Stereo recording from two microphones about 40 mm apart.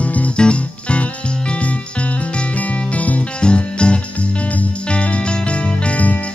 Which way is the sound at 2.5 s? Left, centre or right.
Left.